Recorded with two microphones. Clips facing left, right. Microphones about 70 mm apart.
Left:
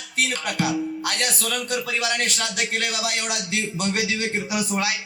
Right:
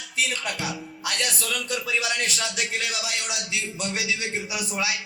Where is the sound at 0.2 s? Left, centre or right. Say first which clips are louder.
Left 4 dB; left.